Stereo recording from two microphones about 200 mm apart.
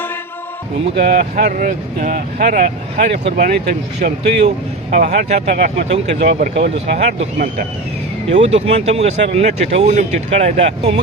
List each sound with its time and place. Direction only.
0.9 s speech: 50° right (ahead or behind)
6.8 s speech: 35° right (ahead or behind)